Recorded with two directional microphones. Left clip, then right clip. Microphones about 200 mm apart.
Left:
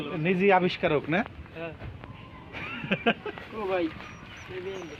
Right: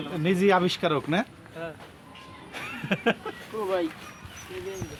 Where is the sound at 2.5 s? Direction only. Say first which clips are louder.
Even; 70° right (ahead or behind).